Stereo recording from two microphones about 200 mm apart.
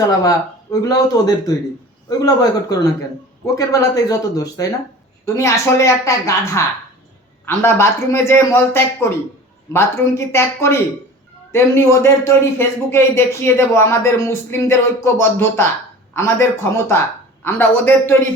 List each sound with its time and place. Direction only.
0.0 s a man's voice: 15° left (ahead or behind)